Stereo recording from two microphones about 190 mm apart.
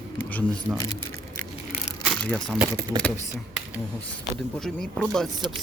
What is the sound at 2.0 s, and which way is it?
Speech, 5° left (ahead or behind).